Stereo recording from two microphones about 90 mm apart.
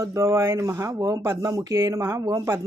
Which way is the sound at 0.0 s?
30° right (ahead or behind).